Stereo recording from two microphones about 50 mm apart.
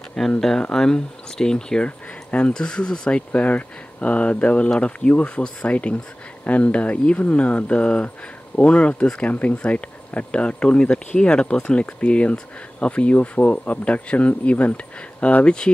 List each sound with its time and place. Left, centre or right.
0.4 s speech: centre
1.9 s a sound: left
2.5 s speech: centre